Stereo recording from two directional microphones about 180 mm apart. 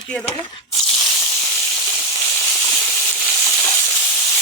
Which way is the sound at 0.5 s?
30° left (ahead or behind).